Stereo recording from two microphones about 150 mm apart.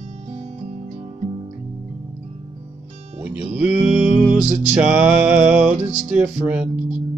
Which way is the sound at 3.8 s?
5° right (ahead or behind).